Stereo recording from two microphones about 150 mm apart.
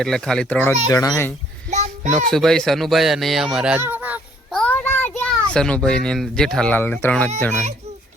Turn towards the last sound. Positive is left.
turn(degrees=5)  # may be behind; listen again after turning